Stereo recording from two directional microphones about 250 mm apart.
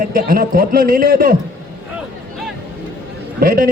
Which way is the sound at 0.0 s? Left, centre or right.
Right.